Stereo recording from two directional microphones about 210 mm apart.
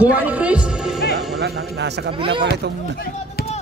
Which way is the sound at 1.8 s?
55° right (ahead or behind).